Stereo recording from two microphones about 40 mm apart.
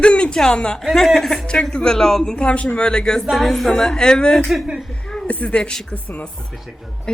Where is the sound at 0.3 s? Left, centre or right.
Left.